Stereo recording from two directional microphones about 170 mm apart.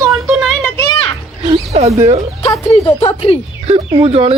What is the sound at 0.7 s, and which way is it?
Children playing, 25° left (ahead or behind).